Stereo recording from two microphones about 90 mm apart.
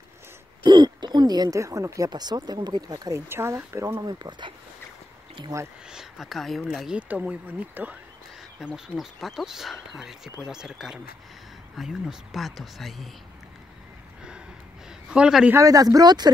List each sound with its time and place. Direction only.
0.7 s speech: 55° right (ahead or behind); by 2.0 s 35° right (ahead or behind)
2.0 s speech: 50° right (ahead or behind)
3.1 s speech: 30° right (ahead or behind)
4.0 s speech: 50° right (ahead or behind)
5.5 s speech: 40° right (ahead or behind)
5.9 s speech: 5° right (ahead or behind)
7.0 s speech: 15° right (ahead or behind)
8.7 s speech: 5° right (ahead or behind)
15.0 s speech: 10° right (ahead or behind)
15.5 s speech: 40° right (ahead or behind)